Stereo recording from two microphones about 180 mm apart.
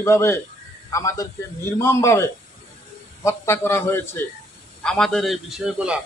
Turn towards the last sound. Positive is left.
turn(degrees=-5)  # may be behind; listen again after turning